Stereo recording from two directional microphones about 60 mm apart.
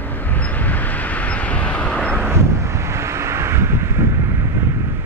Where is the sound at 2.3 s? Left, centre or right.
Right.